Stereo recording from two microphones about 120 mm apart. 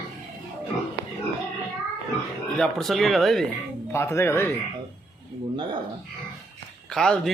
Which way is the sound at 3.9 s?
20° left (ahead or behind).